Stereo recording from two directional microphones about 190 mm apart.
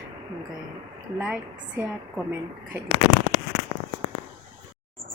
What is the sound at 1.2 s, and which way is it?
Speech, 5° right (ahead or behind).